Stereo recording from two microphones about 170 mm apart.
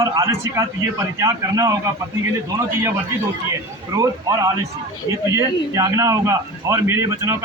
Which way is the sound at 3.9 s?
20° right (ahead or behind).